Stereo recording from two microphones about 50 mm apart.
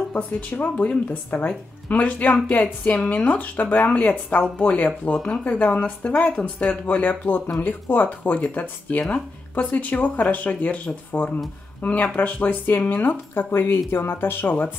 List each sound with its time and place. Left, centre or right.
0.1 s speech: left
6.7 s speech: left